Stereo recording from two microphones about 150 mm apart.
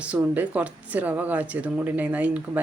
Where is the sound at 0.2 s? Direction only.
10° right (ahead or behind).